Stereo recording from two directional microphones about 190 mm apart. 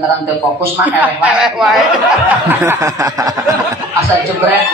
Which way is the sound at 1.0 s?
10° right (ahead or behind).